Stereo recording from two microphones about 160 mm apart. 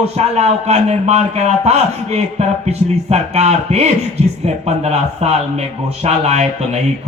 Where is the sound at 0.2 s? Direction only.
45° right (ahead or behind).